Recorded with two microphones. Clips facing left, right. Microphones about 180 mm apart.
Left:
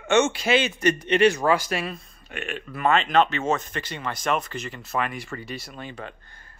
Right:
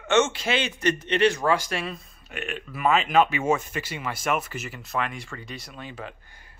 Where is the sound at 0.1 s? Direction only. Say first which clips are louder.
Left 2 dB; 10° left (ahead or behind).